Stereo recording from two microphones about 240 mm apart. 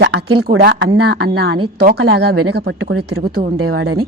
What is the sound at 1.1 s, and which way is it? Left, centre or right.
A woman's voice, right.